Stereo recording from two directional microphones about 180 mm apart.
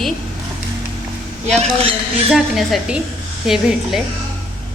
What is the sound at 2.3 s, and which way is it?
A woman's voice, centre (ahead or behind).